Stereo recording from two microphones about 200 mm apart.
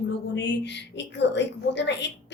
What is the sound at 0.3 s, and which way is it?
A woman's voice, 60° left (ahead or behind).